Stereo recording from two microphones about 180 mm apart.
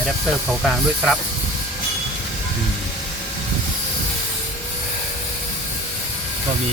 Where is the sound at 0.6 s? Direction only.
Centre (ahead or behind).